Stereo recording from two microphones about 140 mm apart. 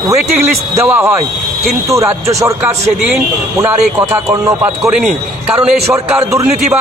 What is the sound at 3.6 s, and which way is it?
A man's voice, 20° right (ahead or behind).